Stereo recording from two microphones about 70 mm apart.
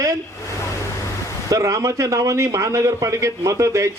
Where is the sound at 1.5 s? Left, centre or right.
Right.